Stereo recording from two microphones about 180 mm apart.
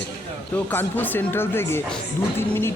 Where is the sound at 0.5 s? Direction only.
10° left (ahead or behind).